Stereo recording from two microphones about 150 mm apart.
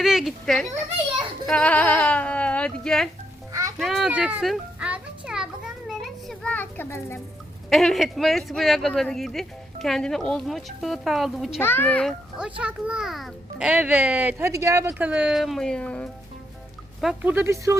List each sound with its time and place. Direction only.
0.0 s speech: centre (ahead or behind)
4.1 s children playing: 10° right (ahead or behind); by 7.2 s 15° left (ahead or behind)
7.7 s speech: centre (ahead or behind)
11.6 s speech: 15° left (ahead or behind)
12.4 s a child's voice: 10° right (ahead or behind); by 16.0 s 10° left (ahead or behind)
17.0 s speech: centre (ahead or behind)
17.3 s a child's voice: 20° right (ahead or behind)